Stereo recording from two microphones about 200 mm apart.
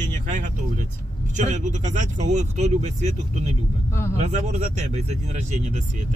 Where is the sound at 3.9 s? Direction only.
10° left (ahead or behind).